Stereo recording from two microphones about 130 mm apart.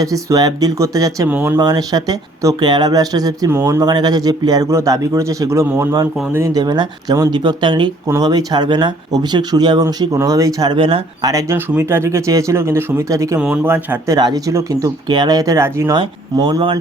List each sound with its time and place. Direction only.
0.0 s speech: 25° right (ahead or behind)
1.3 s speech: 15° right (ahead or behind)
1.5 s speech: 30° right (ahead or behind)
11.2 s speech: 25° right (ahead or behind)
13.4 s speech: 15° right (ahead or behind)
14.2 s speech: 30° right (ahead or behind)
16.0 s speech: 35° right (ahead or behind)